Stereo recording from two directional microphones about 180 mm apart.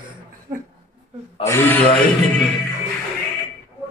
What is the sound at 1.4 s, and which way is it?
Speech, 15° left (ahead or behind).